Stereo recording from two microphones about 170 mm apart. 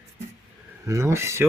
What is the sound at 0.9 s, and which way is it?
Speech, 15° right (ahead or behind).